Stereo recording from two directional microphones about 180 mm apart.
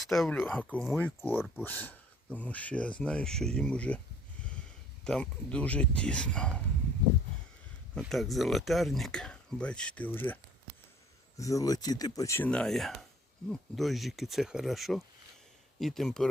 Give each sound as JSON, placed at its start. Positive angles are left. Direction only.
{"t": 0.0, "sound": "speech", "side_deg": 0}
{"t": 5.0, "sound": "speech", "side_deg": 5}
{"t": 8.0, "sound": "speech", "side_deg": 0}
{"t": 11.3, "sound": "speech", "side_deg": 20}
{"t": 12.5, "sound": "speech", "side_deg": 5}